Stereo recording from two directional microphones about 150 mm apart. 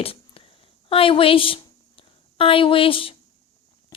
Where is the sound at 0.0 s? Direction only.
40° left (ahead or behind).